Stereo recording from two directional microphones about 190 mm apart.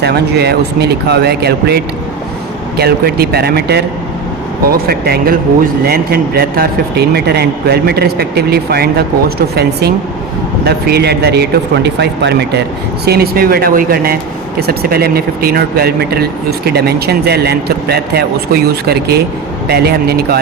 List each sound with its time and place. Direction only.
0.0 s speech: 60° right (ahead or behind)
10.6 s speech: 55° right (ahead or behind)
13.1 s speech: 55° right (ahead or behind)